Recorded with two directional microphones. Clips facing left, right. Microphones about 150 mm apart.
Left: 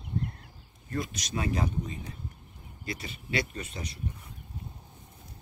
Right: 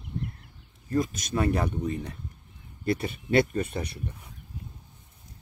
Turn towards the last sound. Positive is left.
turn(degrees=-60)  # may be behind; listen again after turning